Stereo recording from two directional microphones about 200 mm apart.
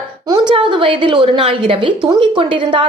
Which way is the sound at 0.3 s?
25° right (ahead or behind).